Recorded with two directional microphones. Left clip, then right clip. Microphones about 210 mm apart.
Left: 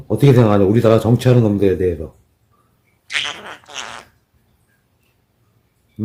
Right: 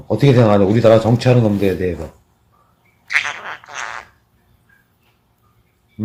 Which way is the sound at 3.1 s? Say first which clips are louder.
Right 3 dB; 20° left (ahead or behind).